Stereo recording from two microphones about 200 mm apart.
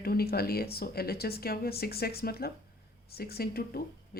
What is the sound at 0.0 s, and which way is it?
Speech, 50° left (ahead or behind).